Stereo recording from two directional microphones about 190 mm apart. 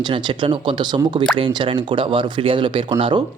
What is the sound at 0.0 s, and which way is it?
Speech, 25° right (ahead or behind).